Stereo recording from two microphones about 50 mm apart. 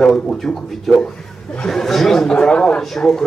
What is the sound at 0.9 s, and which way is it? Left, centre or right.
Speech, centre.